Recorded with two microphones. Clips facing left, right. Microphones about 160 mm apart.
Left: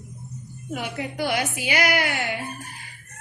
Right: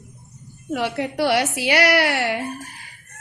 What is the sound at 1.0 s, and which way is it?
Speech, 75° right (ahead or behind).